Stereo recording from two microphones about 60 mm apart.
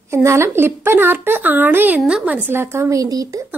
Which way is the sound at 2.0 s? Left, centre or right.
Centre.